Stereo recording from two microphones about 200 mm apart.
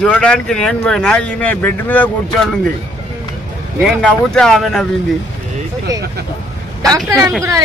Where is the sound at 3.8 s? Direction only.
Centre (ahead or behind).